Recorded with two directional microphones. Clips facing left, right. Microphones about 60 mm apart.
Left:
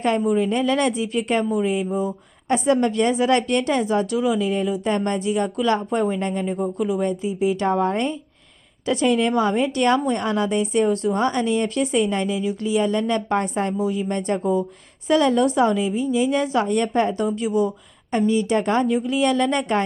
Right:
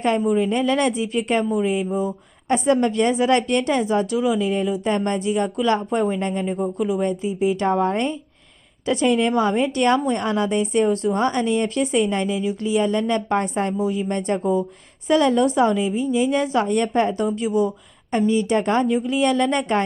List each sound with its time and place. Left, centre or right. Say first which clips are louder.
0.3 s a woman's voice: even; right
6.1 s a woman's voice: even; right; by 7.0 s centre
7.0 s a woman's voice: right 1 dB; right